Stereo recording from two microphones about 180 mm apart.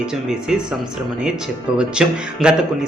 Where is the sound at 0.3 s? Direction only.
5° right (ahead or behind).